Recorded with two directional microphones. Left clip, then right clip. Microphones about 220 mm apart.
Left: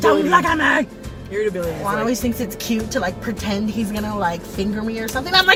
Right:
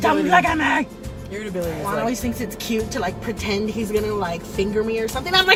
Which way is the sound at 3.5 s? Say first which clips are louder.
Right 4 dB; 15° left (ahead or behind).